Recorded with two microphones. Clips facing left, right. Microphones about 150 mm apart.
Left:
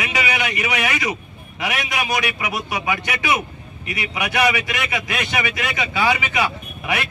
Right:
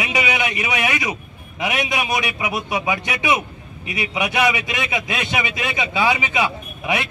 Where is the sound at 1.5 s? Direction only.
20° right (ahead or behind).